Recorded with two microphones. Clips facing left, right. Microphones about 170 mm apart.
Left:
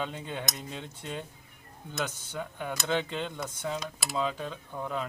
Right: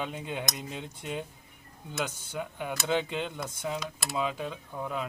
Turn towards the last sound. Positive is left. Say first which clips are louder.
# even
turn(degrees=-5)  # may be behind; listen again after turning